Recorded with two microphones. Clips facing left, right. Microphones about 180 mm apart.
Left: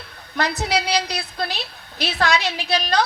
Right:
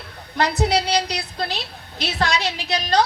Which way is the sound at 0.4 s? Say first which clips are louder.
Right 4 dB; 35° right (ahead or behind).